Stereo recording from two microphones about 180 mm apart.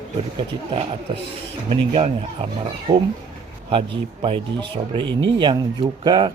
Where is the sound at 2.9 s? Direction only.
15° right (ahead or behind).